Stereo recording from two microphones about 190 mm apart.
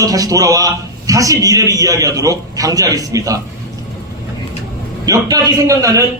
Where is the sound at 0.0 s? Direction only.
20° right (ahead or behind).